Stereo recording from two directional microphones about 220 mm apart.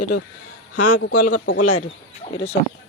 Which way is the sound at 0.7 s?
90° left.